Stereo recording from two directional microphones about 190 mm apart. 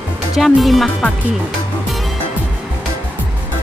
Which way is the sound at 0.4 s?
Centre (ahead or behind).